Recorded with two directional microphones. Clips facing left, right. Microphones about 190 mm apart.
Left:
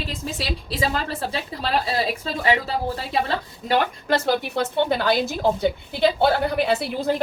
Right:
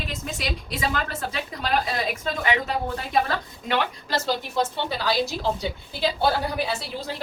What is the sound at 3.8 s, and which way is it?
A woman's voice, 55° left (ahead or behind).